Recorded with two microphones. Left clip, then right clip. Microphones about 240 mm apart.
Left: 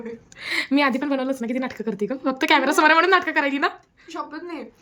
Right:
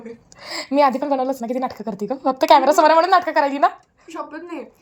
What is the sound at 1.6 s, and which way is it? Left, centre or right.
Speech, centre.